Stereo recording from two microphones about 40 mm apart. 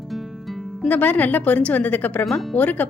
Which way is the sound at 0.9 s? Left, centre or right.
Left.